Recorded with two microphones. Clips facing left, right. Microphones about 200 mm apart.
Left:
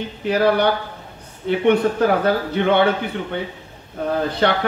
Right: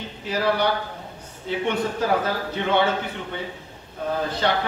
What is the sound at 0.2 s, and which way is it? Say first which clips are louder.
Speech: left 7 dB; 60° left (ahead or behind).